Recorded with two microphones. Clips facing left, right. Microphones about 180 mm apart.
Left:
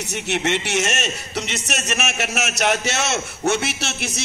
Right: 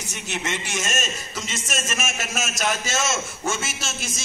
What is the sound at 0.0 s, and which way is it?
A man's voice, 70° left (ahead or behind).